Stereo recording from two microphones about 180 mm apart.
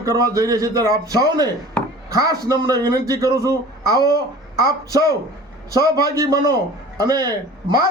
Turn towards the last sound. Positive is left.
turn(degrees=-20)  # may be behind; listen again after turning